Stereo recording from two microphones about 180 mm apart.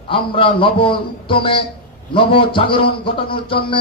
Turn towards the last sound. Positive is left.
turn(degrees=30)  # may be behind; listen again after turning